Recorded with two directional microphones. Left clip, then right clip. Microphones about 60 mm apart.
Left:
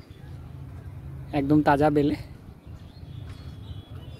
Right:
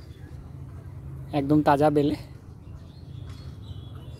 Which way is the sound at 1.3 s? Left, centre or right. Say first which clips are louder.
Even; left.